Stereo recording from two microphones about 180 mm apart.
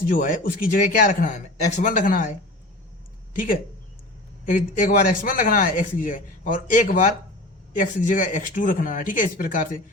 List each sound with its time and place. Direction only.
0.0 s a man's voice: 50° left (ahead or behind)
3.3 s a man's voice: 50° left (ahead or behind)